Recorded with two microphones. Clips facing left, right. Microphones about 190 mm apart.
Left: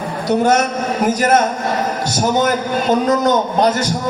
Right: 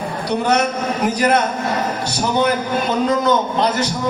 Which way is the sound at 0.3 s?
45° left (ahead or behind).